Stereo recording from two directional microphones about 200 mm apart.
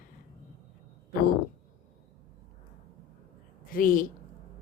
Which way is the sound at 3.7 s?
45° left (ahead or behind).